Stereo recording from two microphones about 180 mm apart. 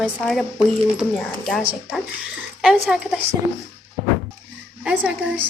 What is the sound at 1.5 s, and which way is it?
A woman's voice, 5° right (ahead or behind).